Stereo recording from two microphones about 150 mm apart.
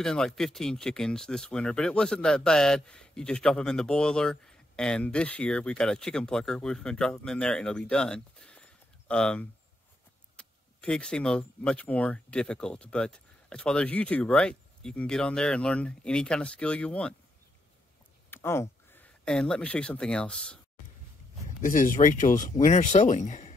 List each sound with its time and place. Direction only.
0.0 s speech: 5° left (ahead or behind)
18.3 s speech: 15° left (ahead or behind)
21.5 s speech: 60° left (ahead or behind)